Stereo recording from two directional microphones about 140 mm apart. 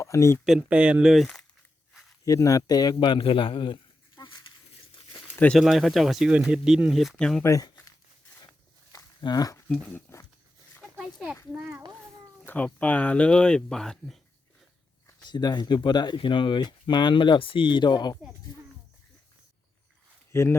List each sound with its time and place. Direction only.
0.0 s speech: 20° left (ahead or behind)
0.4 s speech: 5° right (ahead or behind)
2.2 s speech: 25° left (ahead or behind)
4.2 s a sound: 35° left (ahead or behind)
5.5 s speech: centre (ahead or behind)
7.4 s a sound: 20° left (ahead or behind)
9.6 s speech: 5° left (ahead or behind)
10.9 s a sound: 5° right (ahead or behind)
12.5 s speech: 10° left (ahead or behind)
15.2 s speech: 30° left (ahead or behind)
20.3 s speech: 20° left (ahead or behind)